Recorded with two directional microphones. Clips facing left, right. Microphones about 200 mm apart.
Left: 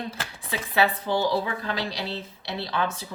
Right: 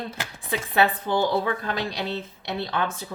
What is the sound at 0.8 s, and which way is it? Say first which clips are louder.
Speech: right 1 dB; 55° right (ahead or behind).